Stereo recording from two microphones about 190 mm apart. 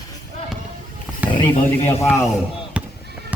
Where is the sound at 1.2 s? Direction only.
10° right (ahead or behind).